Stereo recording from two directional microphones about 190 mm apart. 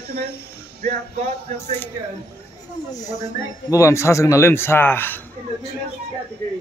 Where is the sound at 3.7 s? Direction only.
15° left (ahead or behind).